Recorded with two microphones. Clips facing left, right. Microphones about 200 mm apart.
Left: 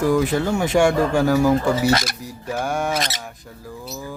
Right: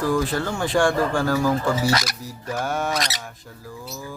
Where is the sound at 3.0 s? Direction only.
25° left (ahead or behind).